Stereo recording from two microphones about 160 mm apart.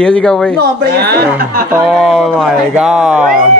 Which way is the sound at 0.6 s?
90° right.